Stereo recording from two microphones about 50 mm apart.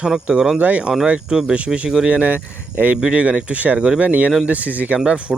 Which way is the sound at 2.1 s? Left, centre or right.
Right.